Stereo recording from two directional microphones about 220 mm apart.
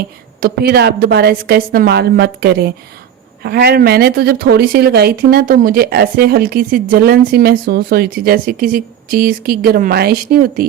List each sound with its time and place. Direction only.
0.3 s speech: 45° right (ahead or behind)